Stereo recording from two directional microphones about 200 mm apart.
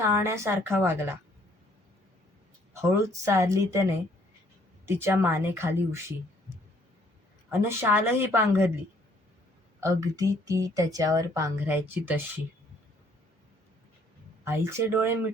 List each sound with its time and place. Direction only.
0.0 s a woman's voice: 15° right (ahead or behind)
2.9 s a woman's voice: 15° right (ahead or behind)
4.9 s a woman's voice: 10° right (ahead or behind)
7.6 s a woman's voice: 10° right (ahead or behind)
9.8 s a woman's voice: 15° right (ahead or behind)
14.4 s a woman's voice: 15° right (ahead or behind)